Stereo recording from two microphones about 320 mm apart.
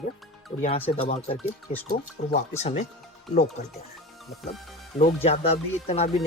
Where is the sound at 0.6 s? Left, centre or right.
Centre.